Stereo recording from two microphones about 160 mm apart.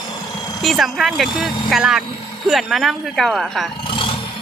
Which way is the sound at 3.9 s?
30° left (ahead or behind).